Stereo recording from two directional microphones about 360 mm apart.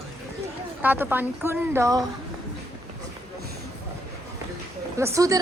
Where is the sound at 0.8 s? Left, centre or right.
Centre.